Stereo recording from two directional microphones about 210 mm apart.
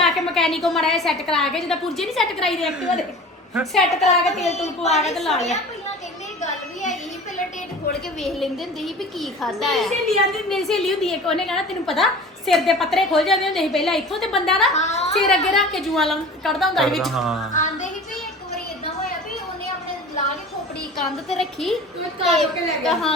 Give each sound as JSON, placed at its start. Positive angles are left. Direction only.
{"t": 0.0, "sound": "a woman's voice", "side_deg": 0}
{"t": 4.0, "sound": "a woman's voice", "side_deg": 30}
{"t": 5.1, "sound": "a woman's voice", "side_deg": 0}
{"t": 8.2, "sound": "a woman's voice", "side_deg": 0}
{"t": 14.7, "sound": "a woman's voice", "side_deg": 35}
{"t": 15.3, "sound": "a woman's voice", "side_deg": 0}
{"t": 21.0, "sound": "a woman's voice", "side_deg": 0}